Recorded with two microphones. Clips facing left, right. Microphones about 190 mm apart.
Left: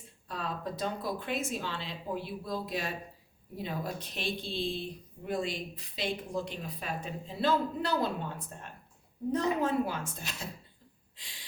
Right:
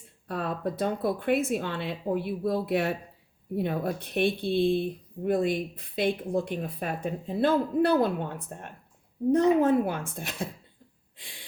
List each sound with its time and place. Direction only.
0.3 s speech: 60° right (ahead or behind)
11.2 s gasp: 55° right (ahead or behind)